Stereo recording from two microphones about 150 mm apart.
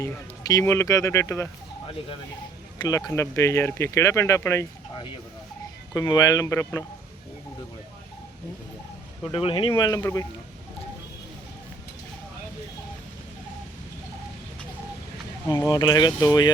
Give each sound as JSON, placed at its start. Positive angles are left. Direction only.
{"t": 0.0, "sound": "speech", "side_deg": 20}
{"t": 2.7, "sound": "speech", "side_deg": 25}
{"t": 5.9, "sound": "speech", "side_deg": 25}
{"t": 9.3, "sound": "speech", "side_deg": 35}
{"t": 15.4, "sound": "speech", "side_deg": 20}